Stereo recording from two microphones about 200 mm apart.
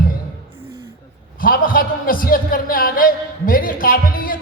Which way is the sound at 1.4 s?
45° left (ahead or behind).